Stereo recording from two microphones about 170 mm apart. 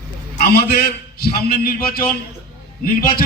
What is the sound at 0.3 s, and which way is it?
A man's voice, 65° left (ahead or behind).